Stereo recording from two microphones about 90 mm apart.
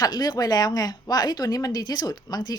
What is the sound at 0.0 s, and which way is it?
A woman's voice, 50° left (ahead or behind).